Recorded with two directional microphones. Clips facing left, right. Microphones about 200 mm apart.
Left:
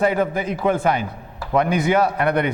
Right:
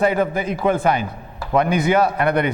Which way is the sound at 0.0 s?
15° right (ahead or behind).